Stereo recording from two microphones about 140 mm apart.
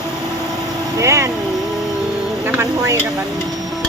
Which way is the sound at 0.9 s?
20° right (ahead or behind).